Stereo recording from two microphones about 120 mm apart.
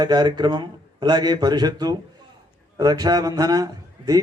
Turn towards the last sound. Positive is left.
turn(degrees=-30)  # may be behind; listen again after turning